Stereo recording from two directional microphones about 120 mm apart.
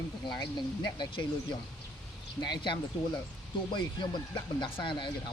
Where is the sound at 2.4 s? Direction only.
40° left (ahead or behind).